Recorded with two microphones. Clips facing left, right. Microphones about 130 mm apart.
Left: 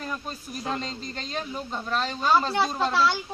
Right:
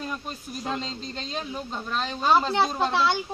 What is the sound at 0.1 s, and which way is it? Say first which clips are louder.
Speech: even; 5° right (ahead or behind).